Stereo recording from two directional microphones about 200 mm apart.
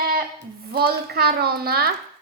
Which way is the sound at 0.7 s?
50° right (ahead or behind).